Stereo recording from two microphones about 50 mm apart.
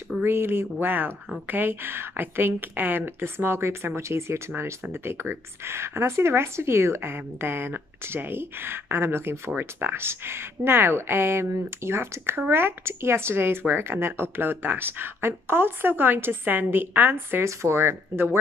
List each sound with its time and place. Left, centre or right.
0.2 s speech: right
17.5 s speech: right